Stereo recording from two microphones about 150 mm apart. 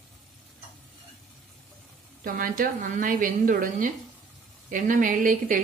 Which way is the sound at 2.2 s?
70° right (ahead or behind).